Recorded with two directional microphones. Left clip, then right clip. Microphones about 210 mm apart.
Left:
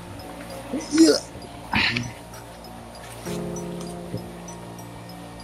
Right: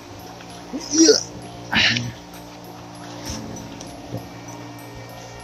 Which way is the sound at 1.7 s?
15° right (ahead or behind).